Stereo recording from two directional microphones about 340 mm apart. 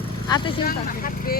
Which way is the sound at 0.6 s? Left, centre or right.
Left.